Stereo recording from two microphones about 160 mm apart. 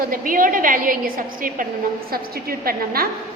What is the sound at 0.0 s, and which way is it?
A woman's voice, 60° right (ahead or behind).